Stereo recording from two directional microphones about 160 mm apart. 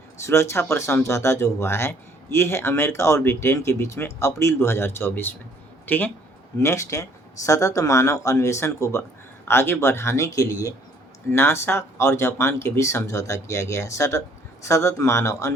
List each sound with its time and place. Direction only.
0.3 s speech: 15° left (ahead or behind)